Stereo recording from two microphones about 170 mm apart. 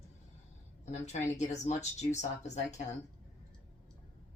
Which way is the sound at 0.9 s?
40° left (ahead or behind).